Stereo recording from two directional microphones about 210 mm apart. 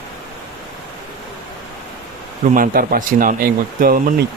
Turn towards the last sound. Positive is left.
turn(degrees=-40)  # may be behind; listen again after turning